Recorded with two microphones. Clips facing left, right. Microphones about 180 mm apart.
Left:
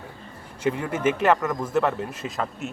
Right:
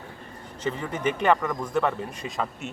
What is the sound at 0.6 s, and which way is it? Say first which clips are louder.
Speech: left 4 dB; 10° left (ahead or behind).